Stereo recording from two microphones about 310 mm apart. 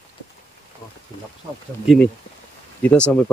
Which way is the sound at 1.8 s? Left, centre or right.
Centre.